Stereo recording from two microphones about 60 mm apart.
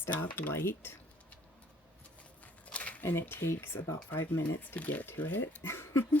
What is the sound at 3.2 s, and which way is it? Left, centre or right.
Speech, left.